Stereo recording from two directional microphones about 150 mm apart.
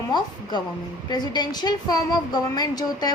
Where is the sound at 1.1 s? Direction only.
30° left (ahead or behind).